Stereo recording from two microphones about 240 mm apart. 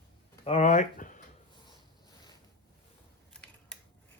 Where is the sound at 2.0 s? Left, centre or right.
Centre.